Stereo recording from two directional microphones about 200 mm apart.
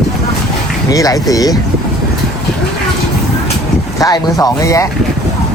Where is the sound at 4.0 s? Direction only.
20° left (ahead or behind).